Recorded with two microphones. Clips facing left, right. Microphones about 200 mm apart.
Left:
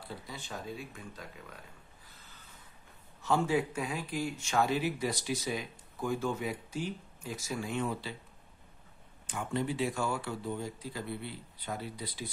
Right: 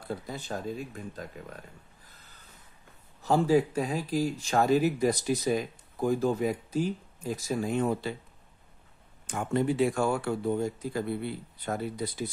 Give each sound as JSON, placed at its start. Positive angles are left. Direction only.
{"t": 0.1, "sound": "speech", "side_deg": -40}
{"t": 3.2, "sound": "speech", "side_deg": -35}
{"t": 9.3, "sound": "speech", "side_deg": -45}